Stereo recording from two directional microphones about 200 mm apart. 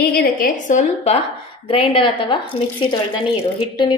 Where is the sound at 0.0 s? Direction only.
50° left (ahead or behind).